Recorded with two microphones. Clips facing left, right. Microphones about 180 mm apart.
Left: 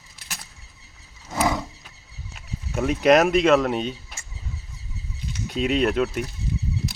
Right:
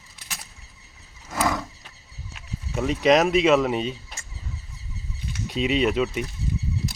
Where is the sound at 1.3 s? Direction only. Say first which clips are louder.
Left 2 dB; 20° left (ahead or behind).